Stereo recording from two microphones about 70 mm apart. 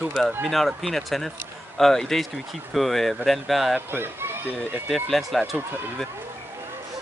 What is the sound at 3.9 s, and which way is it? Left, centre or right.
Speech, right.